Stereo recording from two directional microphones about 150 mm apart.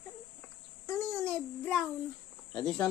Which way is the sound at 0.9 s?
15° left (ahead or behind).